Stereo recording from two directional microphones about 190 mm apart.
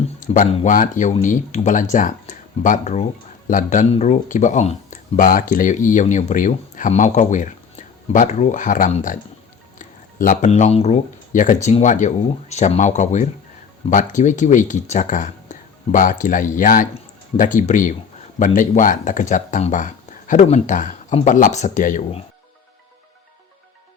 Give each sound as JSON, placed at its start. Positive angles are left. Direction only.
{"t": 0.2, "sound": "speech", "side_deg": 40}